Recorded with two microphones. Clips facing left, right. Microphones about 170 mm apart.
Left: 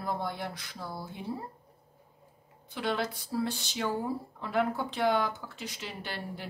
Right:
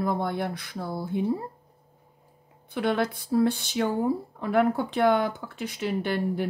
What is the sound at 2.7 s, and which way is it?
Speech, 55° right (ahead or behind).